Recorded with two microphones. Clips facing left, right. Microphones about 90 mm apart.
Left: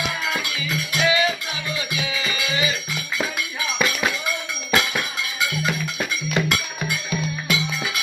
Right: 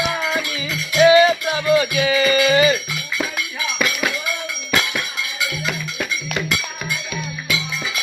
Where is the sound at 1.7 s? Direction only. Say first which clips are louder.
Right 12 dB; 55° right (ahead or behind).